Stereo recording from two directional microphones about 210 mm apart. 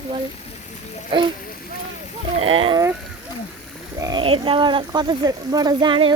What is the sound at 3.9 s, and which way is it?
Speech, 20° right (ahead or behind).